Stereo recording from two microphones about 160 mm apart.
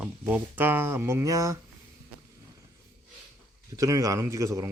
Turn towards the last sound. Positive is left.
turn(degrees=-20)  # may be behind; listen again after turning